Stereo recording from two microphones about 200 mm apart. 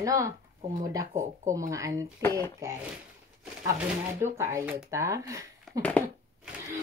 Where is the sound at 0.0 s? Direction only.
15° right (ahead or behind).